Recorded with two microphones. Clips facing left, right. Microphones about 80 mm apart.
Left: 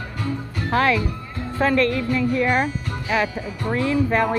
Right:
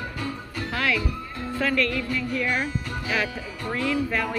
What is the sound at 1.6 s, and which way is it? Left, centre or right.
Speech, left.